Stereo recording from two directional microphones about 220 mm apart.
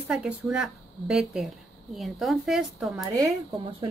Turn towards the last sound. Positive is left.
turn(degrees=-15)  # may be behind; listen again after turning